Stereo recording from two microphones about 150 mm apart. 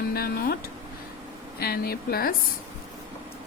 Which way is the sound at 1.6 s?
90° left.